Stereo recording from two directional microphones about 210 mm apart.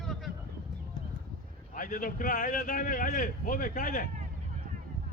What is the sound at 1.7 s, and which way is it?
A man's voice, 40° left (ahead or behind).